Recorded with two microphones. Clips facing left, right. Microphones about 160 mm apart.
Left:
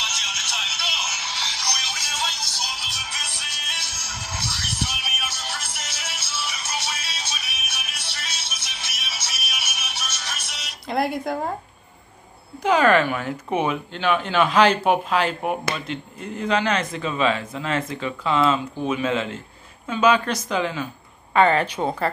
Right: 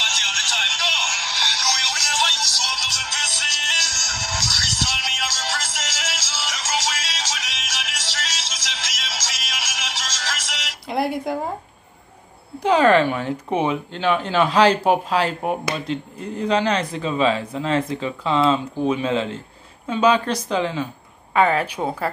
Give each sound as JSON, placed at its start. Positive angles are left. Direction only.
{"t": 0.0, "sound": "music", "side_deg": -90}
{"t": 10.9, "sound": "speech", "side_deg": -10}
{"t": 12.6, "sound": "speech", "side_deg": -30}
{"t": 21.3, "sound": "speech", "side_deg": -5}